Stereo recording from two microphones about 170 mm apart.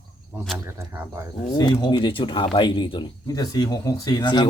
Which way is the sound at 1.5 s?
25° left (ahead or behind).